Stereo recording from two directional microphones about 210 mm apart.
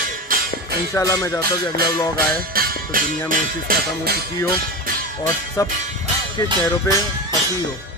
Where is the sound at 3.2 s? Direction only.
45° right (ahead or behind).